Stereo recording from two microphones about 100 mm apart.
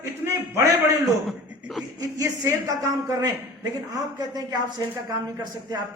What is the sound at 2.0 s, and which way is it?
A woman's voice, 35° right (ahead or behind).